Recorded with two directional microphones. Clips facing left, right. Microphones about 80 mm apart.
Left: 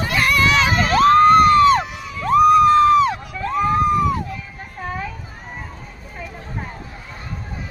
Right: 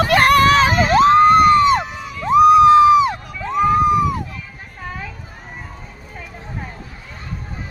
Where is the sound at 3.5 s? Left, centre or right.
Centre.